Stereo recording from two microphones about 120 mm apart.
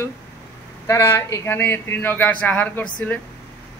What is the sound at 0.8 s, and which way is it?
A man's voice, 20° left (ahead or behind).